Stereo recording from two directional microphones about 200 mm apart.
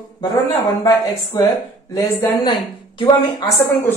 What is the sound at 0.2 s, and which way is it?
A woman's voice, 15° left (ahead or behind).